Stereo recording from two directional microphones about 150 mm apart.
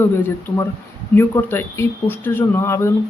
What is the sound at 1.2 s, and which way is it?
Speech, 15° left (ahead or behind).